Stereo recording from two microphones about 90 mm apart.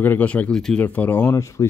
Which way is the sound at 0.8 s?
20° left (ahead or behind).